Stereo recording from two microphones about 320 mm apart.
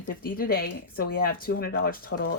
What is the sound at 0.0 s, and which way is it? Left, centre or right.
Speech, left.